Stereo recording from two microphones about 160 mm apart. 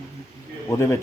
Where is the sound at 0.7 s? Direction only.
15° left (ahead or behind).